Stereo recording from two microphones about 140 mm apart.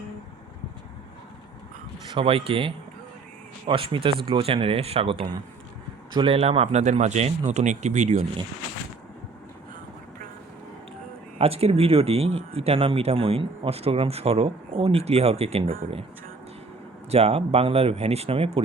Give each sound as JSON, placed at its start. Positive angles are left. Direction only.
{"t": 2.1, "sound": "speech", "side_deg": -40}
{"t": 11.3, "sound": "speech", "side_deg": -45}
{"t": 17.1, "sound": "speech", "side_deg": -45}